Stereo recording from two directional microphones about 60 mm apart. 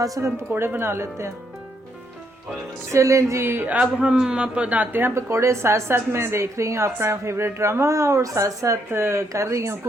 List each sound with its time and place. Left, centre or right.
0.0 s speech: right
0.5 s speech: right
2.9 s speech: right
3.7 s a man's voice: centre; by 5.1 s right
5.1 s a woman's voice: right
8.9 s speech: right
9.3 s speech: right